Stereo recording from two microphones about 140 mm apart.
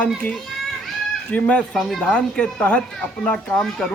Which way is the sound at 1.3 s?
10° left (ahead or behind).